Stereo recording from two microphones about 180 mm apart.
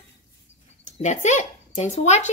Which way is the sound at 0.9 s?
40° left (ahead or behind).